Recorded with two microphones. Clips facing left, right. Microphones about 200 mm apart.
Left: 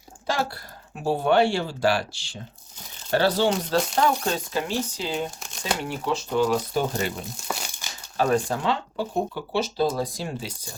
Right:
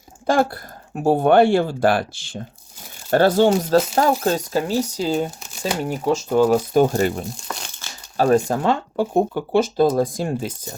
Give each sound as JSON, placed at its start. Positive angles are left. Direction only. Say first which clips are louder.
{"t": 0.3, "sound": "speech", "louder": "right 8 dB", "side_deg": -50}
{"t": 5.4, "sound": "crumpling", "louder": "right 4 dB", "side_deg": -5}
{"t": 5.8, "sound": "speech", "louder": "right 6 dB", "side_deg": -45}
{"t": 7.3, "sound": "crumpling", "louder": "even", "side_deg": 5}
{"t": 8.1, "sound": "speech", "louder": "right 6 dB", "side_deg": -40}